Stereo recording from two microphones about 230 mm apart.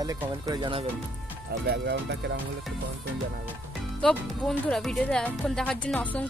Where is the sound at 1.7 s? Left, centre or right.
Right.